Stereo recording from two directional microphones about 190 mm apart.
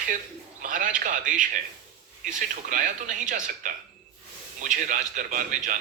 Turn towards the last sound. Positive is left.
turn(degrees=-40)  # may be behind; listen again after turning